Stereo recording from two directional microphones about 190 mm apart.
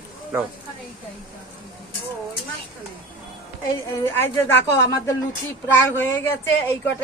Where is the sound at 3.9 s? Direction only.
15° left (ahead or behind).